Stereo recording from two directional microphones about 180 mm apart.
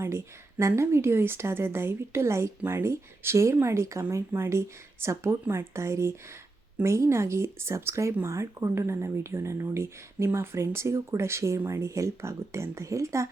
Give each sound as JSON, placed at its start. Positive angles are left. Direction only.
{"t": 0.6, "sound": "speech", "side_deg": -15}